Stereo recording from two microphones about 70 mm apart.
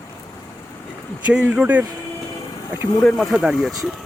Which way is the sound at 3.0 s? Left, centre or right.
Centre.